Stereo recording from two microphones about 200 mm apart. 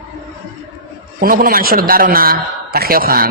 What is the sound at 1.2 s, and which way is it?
A man's voice, 45° right (ahead or behind).